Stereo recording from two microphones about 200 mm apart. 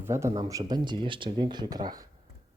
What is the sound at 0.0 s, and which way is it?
Speech, 15° right (ahead or behind).